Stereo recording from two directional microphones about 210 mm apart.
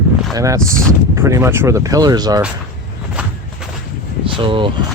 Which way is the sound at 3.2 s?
5° right (ahead or behind).